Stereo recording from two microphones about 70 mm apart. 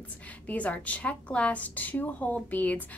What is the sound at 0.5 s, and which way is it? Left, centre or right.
A woman's voice, left.